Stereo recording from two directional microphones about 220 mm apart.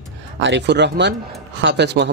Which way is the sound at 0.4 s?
55° right (ahead or behind).